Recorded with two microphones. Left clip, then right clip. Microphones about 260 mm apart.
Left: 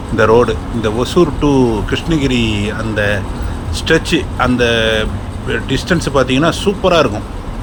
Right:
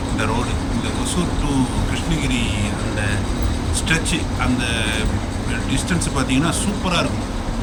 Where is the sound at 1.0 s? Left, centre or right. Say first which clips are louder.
Left 11 dB; centre.